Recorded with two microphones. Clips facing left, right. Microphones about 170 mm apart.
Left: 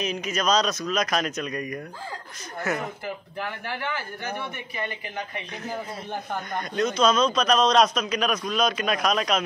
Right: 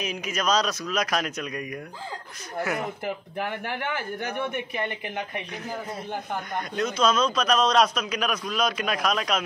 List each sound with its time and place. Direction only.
0.0 s a man's voice: 10° right (ahead or behind)
3.6 s a man's voice: 50° right (ahead or behind)
6.5 s a man's voice: 5° right (ahead or behind)